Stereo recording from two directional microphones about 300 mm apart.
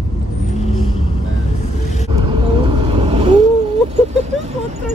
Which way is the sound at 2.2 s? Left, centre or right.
Centre.